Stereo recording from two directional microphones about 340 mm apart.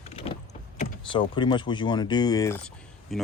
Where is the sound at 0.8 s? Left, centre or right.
Centre.